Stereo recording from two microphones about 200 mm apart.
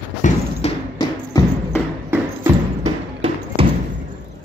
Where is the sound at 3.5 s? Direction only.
25° right (ahead or behind).